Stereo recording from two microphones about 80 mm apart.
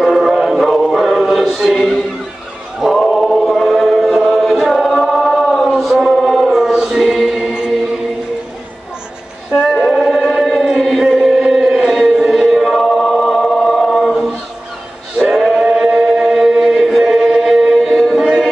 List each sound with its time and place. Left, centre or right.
0.0 s music: centre
2.8 s choir: centre
9.6 s chant: centre
15.1 s choir: centre